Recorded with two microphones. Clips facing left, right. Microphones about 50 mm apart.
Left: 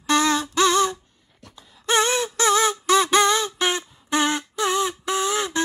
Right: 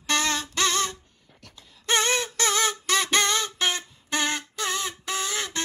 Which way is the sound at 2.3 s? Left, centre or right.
Left.